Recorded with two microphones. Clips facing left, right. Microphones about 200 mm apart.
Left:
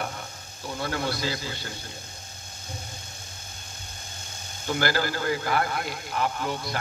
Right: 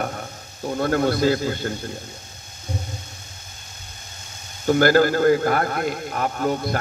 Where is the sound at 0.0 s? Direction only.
50° right (ahead or behind).